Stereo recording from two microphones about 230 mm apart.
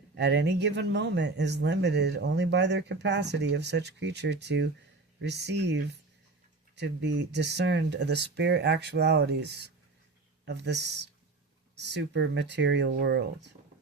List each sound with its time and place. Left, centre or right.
0.2 s speech: right